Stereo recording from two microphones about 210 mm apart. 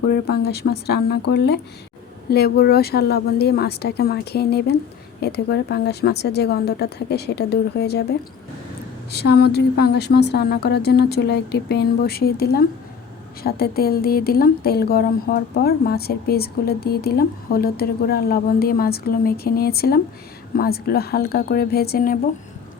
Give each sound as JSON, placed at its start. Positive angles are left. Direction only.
{"t": 0.1, "sound": "speech", "side_deg": 50}
{"t": 9.1, "sound": "speech", "side_deg": 50}